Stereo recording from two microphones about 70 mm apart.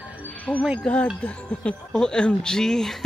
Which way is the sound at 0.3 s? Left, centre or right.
Left.